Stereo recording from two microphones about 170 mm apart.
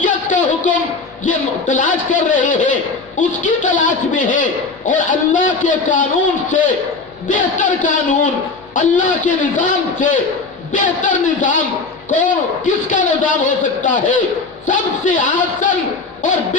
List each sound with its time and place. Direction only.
0.0 s a sound: 50° left (ahead or behind)
1.2 s a man's voice: 50° left (ahead or behind)
7.3 s a man's voice: 50° left (ahead or behind)